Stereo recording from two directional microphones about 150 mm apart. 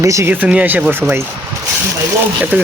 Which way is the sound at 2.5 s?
10° right (ahead or behind).